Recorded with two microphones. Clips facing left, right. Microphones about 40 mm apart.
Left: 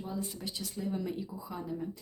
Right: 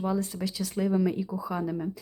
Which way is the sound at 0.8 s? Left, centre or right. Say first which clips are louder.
Right 9 dB; right.